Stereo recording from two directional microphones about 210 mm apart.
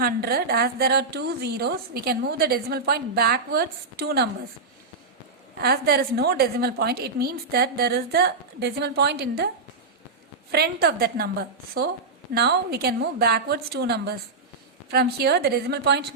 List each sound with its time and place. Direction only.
0.0 s a woman's voice: 45° right (ahead or behind)
5.5 s a woman's voice: 50° right (ahead or behind)
10.5 s a woman's voice: 50° right (ahead or behind)